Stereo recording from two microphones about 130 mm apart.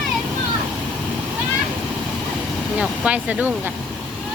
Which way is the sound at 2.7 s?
10° right (ahead or behind).